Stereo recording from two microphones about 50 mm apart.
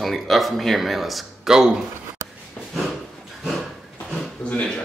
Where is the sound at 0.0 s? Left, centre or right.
Centre.